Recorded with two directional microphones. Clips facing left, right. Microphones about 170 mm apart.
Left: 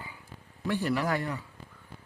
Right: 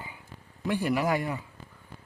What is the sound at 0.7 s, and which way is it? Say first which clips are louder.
Speech: right 2 dB; 15° right (ahead or behind).